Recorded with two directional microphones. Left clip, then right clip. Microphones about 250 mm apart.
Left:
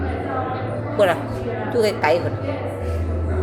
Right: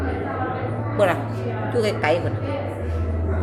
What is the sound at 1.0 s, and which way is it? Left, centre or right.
A woman's voice, centre.